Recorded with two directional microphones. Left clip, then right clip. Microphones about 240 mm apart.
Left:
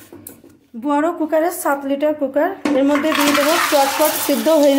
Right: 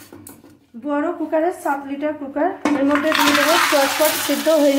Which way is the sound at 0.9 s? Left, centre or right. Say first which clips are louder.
Left 4 dB; left.